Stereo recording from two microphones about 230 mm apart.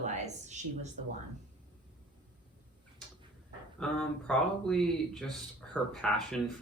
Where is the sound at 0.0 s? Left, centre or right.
Right.